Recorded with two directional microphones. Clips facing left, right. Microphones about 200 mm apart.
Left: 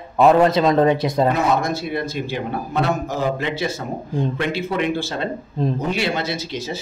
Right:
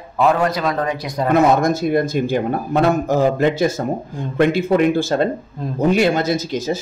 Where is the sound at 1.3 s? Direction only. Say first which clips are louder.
Right 6 dB; 45° right (ahead or behind).